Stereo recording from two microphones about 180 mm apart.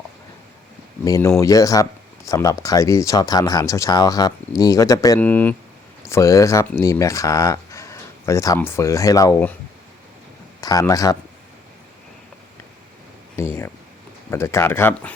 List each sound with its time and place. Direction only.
1.0 s speech: 15° left (ahead or behind)
10.6 s speech: 20° left (ahead or behind)
13.3 s a sound: 15° left (ahead or behind)
14.3 s speech: 15° left (ahead or behind)